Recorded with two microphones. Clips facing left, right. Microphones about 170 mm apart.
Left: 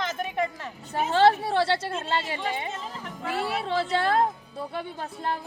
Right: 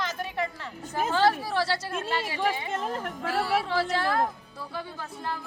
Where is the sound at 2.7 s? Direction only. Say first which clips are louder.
Right 6 dB; 55° right (ahead or behind).